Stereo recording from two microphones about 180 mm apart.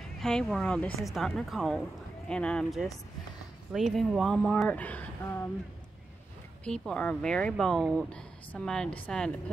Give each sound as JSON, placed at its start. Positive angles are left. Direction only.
{"t": 0.2, "sound": "speech", "side_deg": 5}
{"t": 6.6, "sound": "speech", "side_deg": 5}